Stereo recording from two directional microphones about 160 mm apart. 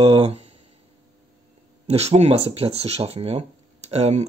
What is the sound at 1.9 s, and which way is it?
Speech, 40° right (ahead or behind).